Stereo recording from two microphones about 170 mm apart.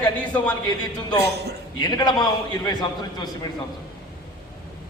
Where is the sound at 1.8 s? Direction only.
25° left (ahead or behind).